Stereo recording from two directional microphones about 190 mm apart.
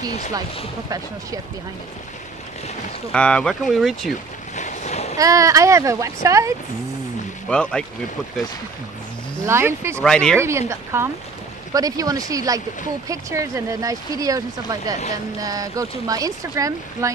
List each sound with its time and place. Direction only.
0.8 s speech: 20° right (ahead or behind)
3.1 s speech: 5° left (ahead or behind)
4.6 s boat: 40° left (ahead or behind)
5.1 s speech: 15° right (ahead or behind)
7.4 s speech: 5° left (ahead or behind)
9.5 s speech: 15° right (ahead or behind)
9.9 s speech: 5° left (ahead or behind)
10.7 s speech: 15° right (ahead or behind)